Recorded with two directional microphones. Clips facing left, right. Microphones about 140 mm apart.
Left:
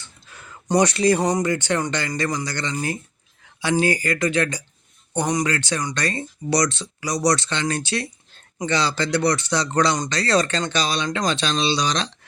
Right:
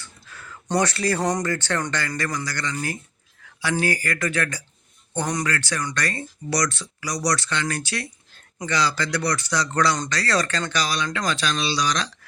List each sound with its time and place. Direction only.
0.0 s speech: 20° left (ahead or behind)